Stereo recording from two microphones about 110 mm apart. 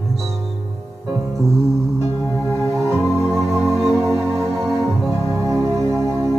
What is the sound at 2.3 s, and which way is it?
Music, 30° left (ahead or behind).